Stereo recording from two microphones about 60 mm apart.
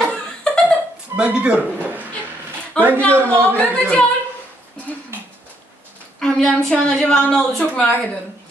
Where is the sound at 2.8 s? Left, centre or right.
Centre.